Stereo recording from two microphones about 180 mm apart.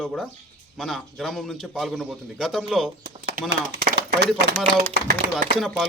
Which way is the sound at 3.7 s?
65° right (ahead or behind).